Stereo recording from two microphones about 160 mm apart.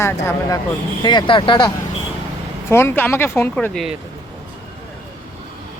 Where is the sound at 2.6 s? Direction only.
15° left (ahead or behind).